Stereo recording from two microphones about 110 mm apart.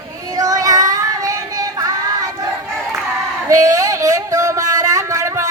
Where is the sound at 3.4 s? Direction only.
30° right (ahead or behind).